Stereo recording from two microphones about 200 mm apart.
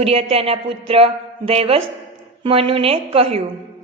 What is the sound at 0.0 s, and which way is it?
A woman's voice, 30° right (ahead or behind).